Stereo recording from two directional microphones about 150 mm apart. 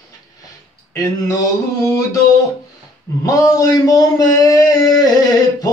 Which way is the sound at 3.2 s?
25° left (ahead or behind).